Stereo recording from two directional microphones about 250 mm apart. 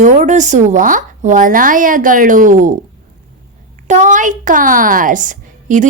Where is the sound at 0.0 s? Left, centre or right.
Right.